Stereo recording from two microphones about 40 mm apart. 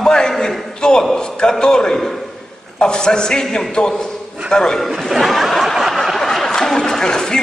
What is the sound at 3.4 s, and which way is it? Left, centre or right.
Speech, centre.